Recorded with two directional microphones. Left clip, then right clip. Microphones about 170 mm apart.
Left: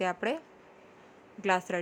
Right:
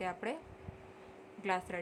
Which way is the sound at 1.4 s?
35° left (ahead or behind).